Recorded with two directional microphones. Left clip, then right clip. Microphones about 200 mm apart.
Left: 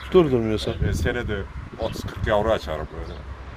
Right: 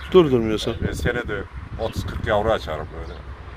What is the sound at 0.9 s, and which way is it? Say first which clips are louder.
Speech: right 2 dB; 15° left (ahead or behind).